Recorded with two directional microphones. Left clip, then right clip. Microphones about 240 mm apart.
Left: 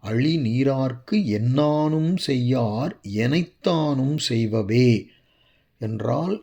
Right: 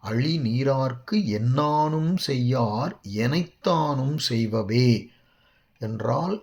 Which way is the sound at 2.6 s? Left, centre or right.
Left.